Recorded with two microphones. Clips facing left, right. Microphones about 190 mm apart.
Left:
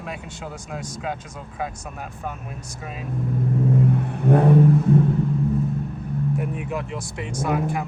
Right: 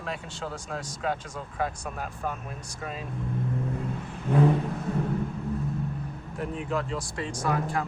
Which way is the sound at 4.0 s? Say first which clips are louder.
Left 5 dB; 60° left (ahead or behind).